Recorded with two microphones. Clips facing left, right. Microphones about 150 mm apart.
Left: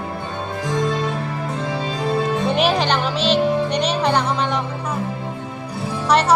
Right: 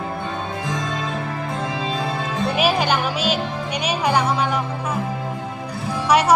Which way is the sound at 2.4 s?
5° right (ahead or behind).